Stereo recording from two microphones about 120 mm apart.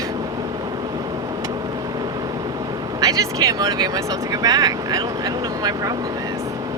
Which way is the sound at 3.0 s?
30° right (ahead or behind).